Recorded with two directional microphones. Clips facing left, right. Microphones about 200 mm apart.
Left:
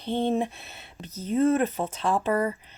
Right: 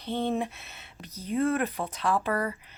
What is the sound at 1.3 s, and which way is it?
Speech, 30° left (ahead or behind).